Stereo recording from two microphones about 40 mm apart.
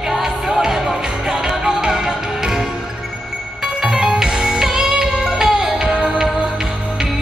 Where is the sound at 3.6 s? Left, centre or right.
Centre.